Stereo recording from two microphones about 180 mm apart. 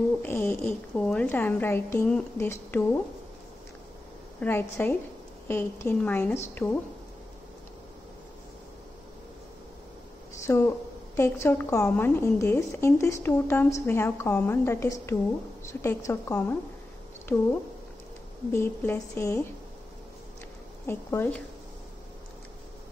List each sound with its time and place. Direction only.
0.2 s a woman's voice: 10° left (ahead or behind)
4.4 s a woman's voice: 10° left (ahead or behind)
10.4 s a woman's voice: 15° left (ahead or behind)
18.5 s a woman's voice: 15° left (ahead or behind)
20.8 s a woman's voice: 10° left (ahead or behind)